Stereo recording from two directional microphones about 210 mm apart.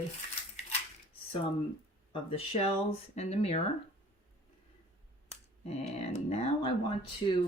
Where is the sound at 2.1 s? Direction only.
25° left (ahead or behind).